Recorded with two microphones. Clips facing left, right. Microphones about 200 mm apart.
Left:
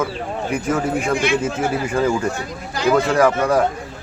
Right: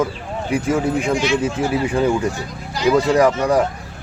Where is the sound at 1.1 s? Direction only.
55° left (ahead or behind).